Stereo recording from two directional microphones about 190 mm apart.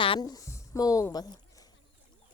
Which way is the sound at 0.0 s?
25° left (ahead or behind).